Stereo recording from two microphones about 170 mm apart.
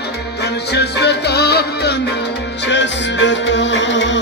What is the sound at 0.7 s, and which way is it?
Music, 80° left.